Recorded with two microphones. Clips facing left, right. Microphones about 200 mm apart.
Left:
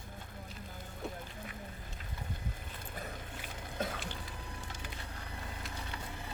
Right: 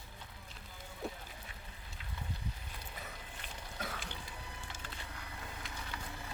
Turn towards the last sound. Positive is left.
turn(degrees=0)  # may be behind; listen again after turning